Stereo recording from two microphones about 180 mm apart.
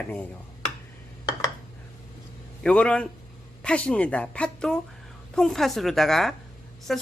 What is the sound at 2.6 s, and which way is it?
A woman's voice, 5° left (ahead or behind).